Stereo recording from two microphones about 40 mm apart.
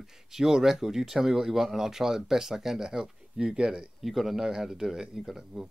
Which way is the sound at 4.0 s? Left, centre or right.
Centre.